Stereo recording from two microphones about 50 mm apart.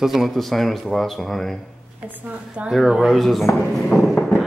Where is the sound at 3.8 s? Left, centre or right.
Centre.